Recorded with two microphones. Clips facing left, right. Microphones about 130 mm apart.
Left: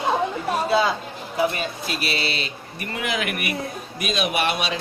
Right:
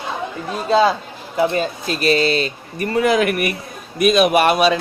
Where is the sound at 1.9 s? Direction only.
45° right (ahead or behind).